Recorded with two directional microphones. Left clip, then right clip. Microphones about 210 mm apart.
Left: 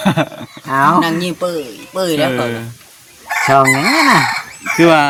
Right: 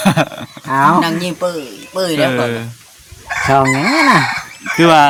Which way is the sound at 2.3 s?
30° right (ahead or behind).